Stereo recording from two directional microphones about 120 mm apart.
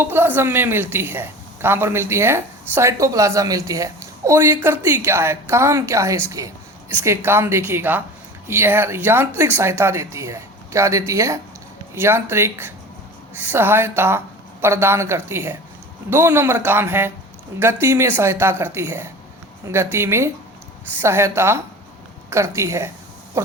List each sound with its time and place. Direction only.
0.0 s a woman's voice: 20° right (ahead or behind)